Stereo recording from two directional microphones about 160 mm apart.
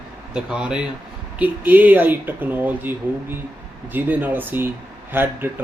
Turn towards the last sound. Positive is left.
turn(degrees=-15)  # may be behind; listen again after turning